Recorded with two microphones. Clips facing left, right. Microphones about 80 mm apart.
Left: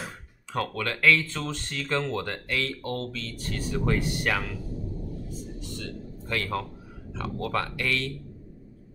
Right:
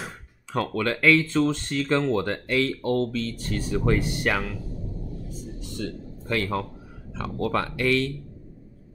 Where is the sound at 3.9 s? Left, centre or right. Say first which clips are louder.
Right 3 dB; right.